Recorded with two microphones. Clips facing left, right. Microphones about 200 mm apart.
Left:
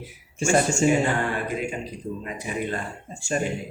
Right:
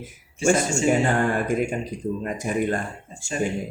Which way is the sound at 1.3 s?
45° right (ahead or behind).